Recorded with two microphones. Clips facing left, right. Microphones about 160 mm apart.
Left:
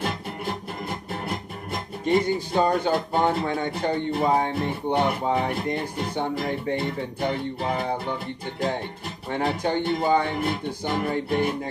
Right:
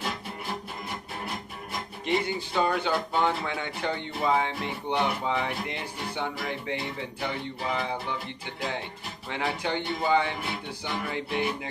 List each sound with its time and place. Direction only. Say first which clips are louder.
2.0 s speech: left 6 dB; 40° left (ahead or behind)